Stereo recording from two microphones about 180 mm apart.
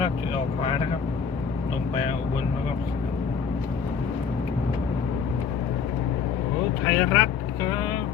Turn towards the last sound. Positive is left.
turn(degrees=10)  # may be behind; listen again after turning